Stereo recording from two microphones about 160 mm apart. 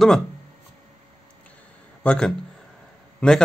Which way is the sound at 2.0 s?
5° left (ahead or behind).